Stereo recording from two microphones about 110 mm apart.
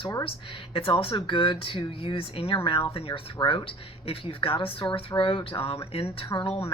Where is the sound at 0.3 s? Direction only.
55° left (ahead or behind).